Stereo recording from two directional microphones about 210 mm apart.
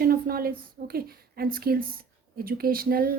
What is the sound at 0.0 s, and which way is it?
Speech, 45° right (ahead or behind).